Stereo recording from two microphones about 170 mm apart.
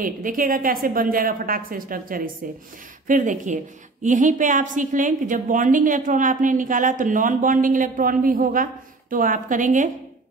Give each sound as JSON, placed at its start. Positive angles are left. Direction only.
{"t": 0.0, "sound": "a woman's voice", "side_deg": -55}